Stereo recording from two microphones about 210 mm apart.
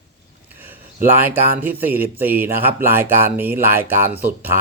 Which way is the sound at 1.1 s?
10° right (ahead or behind).